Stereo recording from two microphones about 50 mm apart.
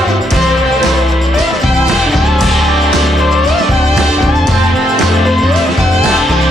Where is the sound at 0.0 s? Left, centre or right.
Centre.